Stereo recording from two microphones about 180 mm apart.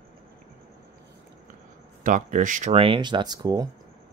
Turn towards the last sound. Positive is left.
turn(degrees=-20)  # may be behind; listen again after turning